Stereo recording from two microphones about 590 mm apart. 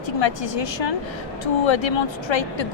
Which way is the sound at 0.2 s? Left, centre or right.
Left.